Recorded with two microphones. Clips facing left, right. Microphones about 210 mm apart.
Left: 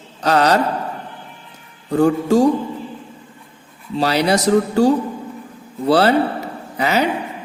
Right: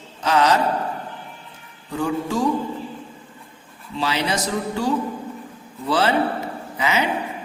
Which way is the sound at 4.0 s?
40° left (ahead or behind).